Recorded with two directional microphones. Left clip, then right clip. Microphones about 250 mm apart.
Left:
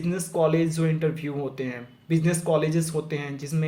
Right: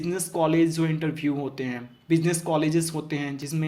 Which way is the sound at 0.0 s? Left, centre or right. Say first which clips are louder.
Left 1 dB; right.